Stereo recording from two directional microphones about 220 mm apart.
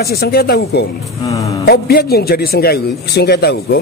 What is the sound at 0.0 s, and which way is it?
A man's voice, 45° left (ahead or behind).